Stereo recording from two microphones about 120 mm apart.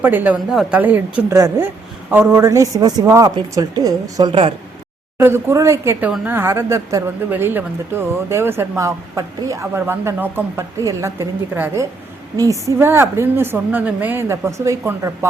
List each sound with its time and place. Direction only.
0.0 s speech: 15° right (ahead or behind)
0.3 s a woman's voice: 5° right (ahead or behind)
0.7 s speech: 15° right (ahead or behind); by 4.3 s 30° right (ahead or behind)
4.3 s speech: 50° right (ahead or behind)
5.1 s speech: 20° right (ahead or behind)